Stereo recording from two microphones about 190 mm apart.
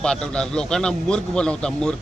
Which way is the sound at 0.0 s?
5° left (ahead or behind).